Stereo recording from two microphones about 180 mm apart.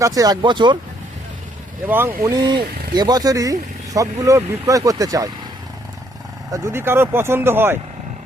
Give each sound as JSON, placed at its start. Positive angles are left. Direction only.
{"t": 0.0, "sound": "speech", "side_deg": -20}
{"t": 1.9, "sound": "speech", "side_deg": -15}
{"t": 6.5, "sound": "speech", "side_deg": -15}